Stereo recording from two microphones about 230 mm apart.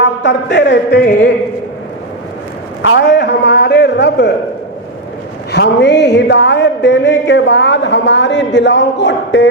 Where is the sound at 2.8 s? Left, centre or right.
Left.